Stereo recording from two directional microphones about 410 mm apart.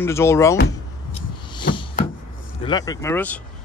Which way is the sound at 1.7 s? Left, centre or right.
Left.